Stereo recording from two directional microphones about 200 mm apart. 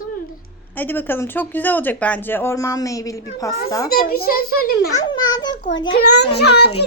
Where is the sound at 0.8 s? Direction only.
10° left (ahead or behind).